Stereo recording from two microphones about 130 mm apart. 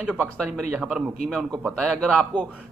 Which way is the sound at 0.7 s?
5° right (ahead or behind).